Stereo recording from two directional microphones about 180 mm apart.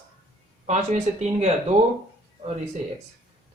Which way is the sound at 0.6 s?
40° right (ahead or behind).